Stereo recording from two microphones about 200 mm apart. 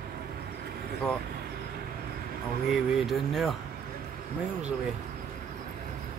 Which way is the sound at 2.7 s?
Centre (ahead or behind).